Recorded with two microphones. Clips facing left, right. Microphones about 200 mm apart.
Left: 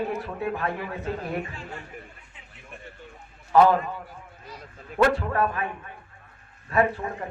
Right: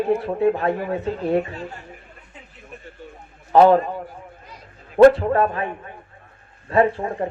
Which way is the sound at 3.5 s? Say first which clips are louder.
Right 5 dB; 35° right (ahead or behind).